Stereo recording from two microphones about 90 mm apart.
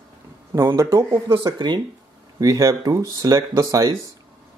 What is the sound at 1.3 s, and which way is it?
Speech, 55° right (ahead or behind).